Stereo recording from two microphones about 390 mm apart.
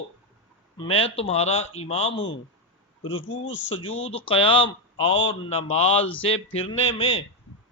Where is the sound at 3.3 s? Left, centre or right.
Left.